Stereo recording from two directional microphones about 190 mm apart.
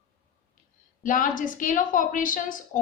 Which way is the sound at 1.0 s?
45° left (ahead or behind).